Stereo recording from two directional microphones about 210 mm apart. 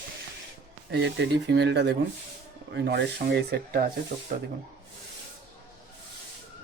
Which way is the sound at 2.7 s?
50° right (ahead or behind).